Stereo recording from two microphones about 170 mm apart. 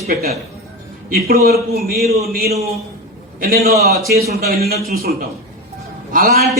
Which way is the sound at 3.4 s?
65° right (ahead or behind).